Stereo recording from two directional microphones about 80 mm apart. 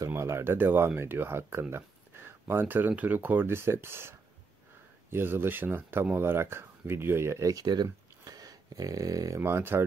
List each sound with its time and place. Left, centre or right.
0.1 s speech: right
7.6 s speech: right
9.4 s speech: right